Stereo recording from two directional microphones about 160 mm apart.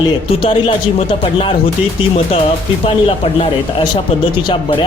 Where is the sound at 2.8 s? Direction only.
35° left (ahead or behind).